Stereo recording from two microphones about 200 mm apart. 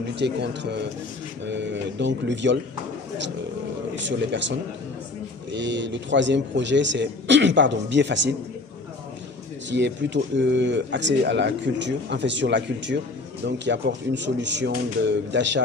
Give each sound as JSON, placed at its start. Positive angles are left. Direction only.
{"t": 0.1, "sound": "speech", "side_deg": -60}
{"t": 3.9, "sound": "speech", "side_deg": -65}
{"t": 9.7, "sound": "speech", "side_deg": -60}